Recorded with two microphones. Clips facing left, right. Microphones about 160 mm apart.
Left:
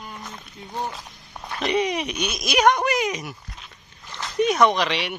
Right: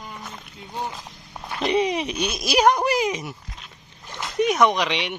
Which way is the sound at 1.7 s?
25° right (ahead or behind).